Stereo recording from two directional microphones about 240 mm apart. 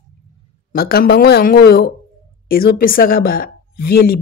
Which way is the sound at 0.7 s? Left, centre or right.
Left.